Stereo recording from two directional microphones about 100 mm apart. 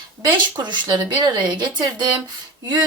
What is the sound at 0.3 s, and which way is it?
A woman's voice, 45° right (ahead or behind).